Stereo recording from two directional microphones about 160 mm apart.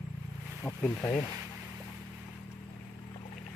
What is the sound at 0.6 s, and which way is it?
Speech, 15° left (ahead or behind).